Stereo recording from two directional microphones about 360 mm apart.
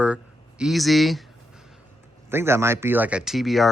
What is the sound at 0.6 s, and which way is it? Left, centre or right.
Speech, centre.